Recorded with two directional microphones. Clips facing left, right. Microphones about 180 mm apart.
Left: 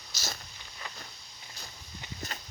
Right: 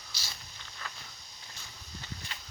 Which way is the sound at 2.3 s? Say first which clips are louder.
Left 4 dB; 45° left (ahead or behind).